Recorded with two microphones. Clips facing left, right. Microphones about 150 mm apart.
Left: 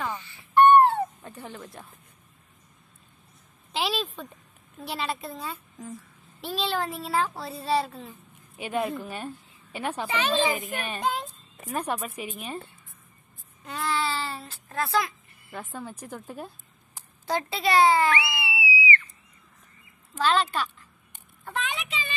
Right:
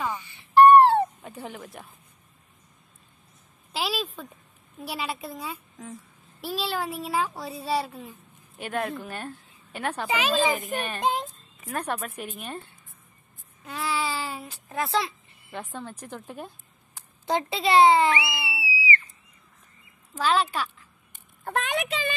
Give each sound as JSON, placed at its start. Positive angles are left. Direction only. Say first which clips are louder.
{"t": 0.0, "sound": "wail", "louder": "right 2 dB", "side_deg": -15}
{"t": 1.2, "sound": "speech", "louder": "right 2 dB", "side_deg": -10}
{"t": 3.7, "sound": "a sound", "louder": "left 1 dB", "side_deg": -5}
{"t": 4.7, "sound": "speech", "louder": "left 1 dB", "side_deg": -10}
{"t": 8.5, "sound": "a woman's voice", "louder": "left 1 dB", "side_deg": 0}
{"t": 10.0, "sound": "speech", "louder": "right 1 dB", "side_deg": -10}
{"t": 11.7, "sound": "speech", "louder": "left 1 dB", "side_deg": 10}
{"t": 13.7, "sound": "a sound", "louder": "left 1 dB", "side_deg": -5}
{"t": 15.5, "sound": "speech", "louder": "right 1 dB", "side_deg": 5}
{"t": 17.3, "sound": "a child's voice", "louder": "right 2 dB", "side_deg": -20}
{"t": 18.5, "sound": "a sound", "louder": "left 2 dB", "side_deg": -30}
{"t": 20.2, "sound": "speech", "louder": "even", "side_deg": -10}
{"t": 21.5, "sound": "a child's voice", "louder": "right 5 dB", "side_deg": -50}